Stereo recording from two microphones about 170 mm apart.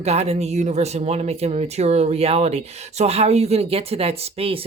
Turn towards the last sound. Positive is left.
turn(degrees=-35)  # may be behind; listen again after turning